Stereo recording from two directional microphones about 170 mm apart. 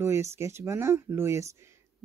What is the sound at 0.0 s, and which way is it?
Speech, 15° right (ahead or behind).